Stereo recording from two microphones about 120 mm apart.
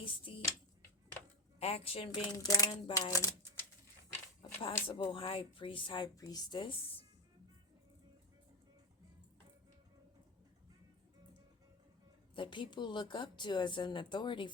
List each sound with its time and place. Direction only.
0.0 s a sound: 45° left (ahead or behind)
1.5 s speech: 60° left (ahead or behind)
2.3 s speech: 30° left (ahead or behind)
4.6 s speech: 45° left (ahead or behind)
6.1 s speech: 35° left (ahead or behind); by 7.0 s 50° left (ahead or behind)
12.3 s speech: 45° left (ahead or behind)